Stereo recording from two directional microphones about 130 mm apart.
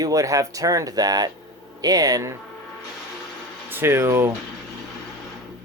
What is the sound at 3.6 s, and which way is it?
Speech, 15° right (ahead or behind).